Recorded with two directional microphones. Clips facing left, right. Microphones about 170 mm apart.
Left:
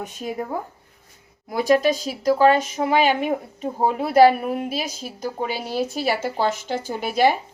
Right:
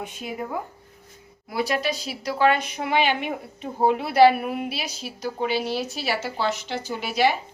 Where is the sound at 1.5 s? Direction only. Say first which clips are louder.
Left 7 dB; 45° left (ahead or behind).